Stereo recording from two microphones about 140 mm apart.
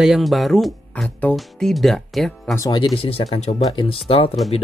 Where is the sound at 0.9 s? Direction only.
10° left (ahead or behind).